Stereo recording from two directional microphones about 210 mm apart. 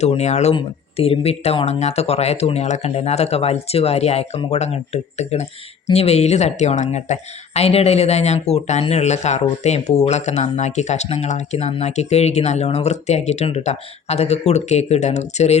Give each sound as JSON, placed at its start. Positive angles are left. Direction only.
{"t": 0.0, "sound": "speech", "side_deg": 30}